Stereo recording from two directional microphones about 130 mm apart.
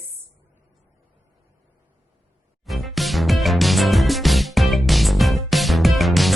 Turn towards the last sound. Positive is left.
turn(degrees=0)  # may be behind; listen again after turning